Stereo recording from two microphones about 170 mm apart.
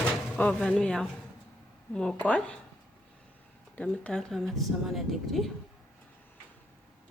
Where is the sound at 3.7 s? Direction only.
5° left (ahead or behind).